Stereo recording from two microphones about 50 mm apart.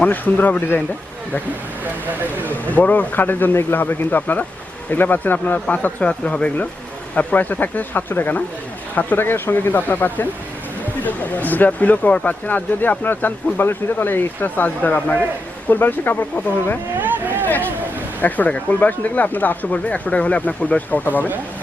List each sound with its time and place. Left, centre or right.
0.0 s speech: left
1.8 s speech: right
2.5 s speech: left
15.7 s speech: left
17.0 s a sound: right
18.2 s speech: left